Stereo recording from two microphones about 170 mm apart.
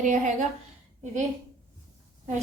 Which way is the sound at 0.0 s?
45° right (ahead or behind).